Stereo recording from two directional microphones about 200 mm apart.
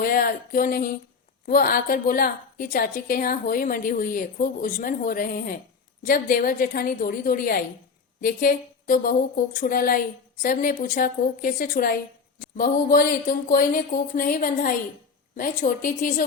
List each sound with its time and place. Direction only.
0.0 s a woman's voice: 45° left (ahead or behind)